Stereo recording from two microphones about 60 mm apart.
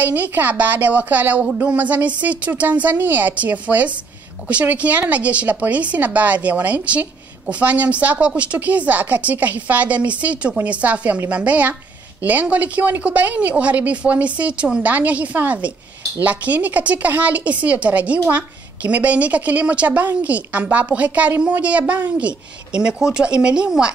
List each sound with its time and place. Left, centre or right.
0.0 s a woman's voice: right